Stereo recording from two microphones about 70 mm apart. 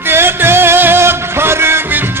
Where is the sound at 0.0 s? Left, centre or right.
Right.